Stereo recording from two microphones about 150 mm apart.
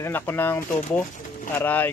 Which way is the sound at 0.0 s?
15° left (ahead or behind).